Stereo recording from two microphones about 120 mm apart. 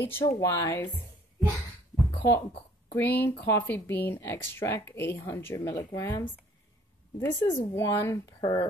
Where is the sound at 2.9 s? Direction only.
15° left (ahead or behind).